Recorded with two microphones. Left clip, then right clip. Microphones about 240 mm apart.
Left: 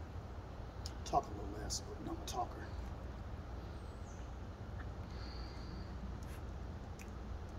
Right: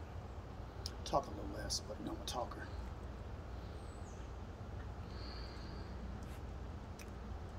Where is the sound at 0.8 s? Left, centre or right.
Centre.